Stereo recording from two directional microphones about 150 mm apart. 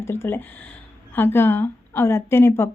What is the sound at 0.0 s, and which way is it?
A woman's voice, 15° left (ahead or behind).